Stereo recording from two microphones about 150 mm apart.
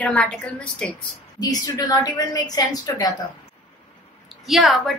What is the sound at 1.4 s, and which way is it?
A woman's voice, 25° left (ahead or behind).